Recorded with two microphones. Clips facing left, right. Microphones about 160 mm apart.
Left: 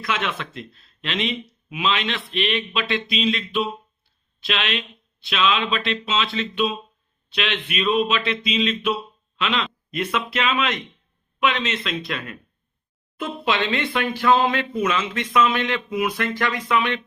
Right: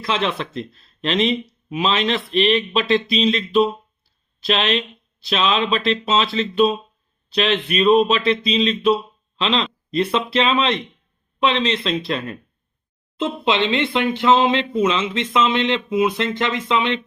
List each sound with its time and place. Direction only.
0.0 s speech: 30° right (ahead or behind)